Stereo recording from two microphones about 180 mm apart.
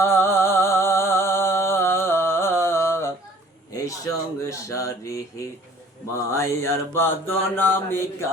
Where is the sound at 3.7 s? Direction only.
20° left (ahead or behind).